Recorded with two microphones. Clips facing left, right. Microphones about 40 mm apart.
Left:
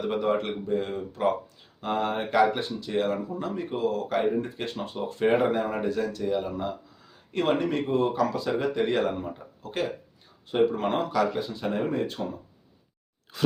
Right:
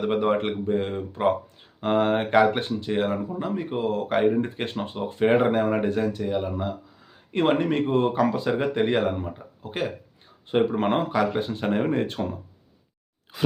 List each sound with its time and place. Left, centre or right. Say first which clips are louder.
0.0 s speech: right 3 dB; right
2.9 s speech: right 1 dB; right
6.2 s speech: right 1 dB; centre
7.3 s speech: right 3 dB; right
9.6 s speech: right 1 dB; right
10.5 s speech: right 2 dB; right